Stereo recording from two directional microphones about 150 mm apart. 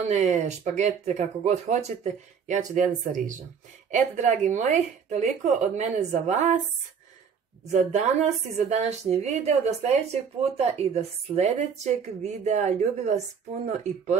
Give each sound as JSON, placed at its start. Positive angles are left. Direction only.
{"t": 0.0, "sound": "speech", "side_deg": -55}
{"t": 7.7, "sound": "speech", "side_deg": -50}